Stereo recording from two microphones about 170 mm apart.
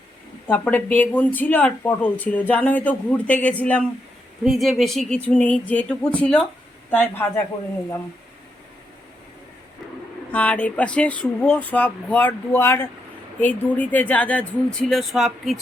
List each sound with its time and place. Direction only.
0.4 s speech: 10° left (ahead or behind)
10.3 s speech: 10° left (ahead or behind)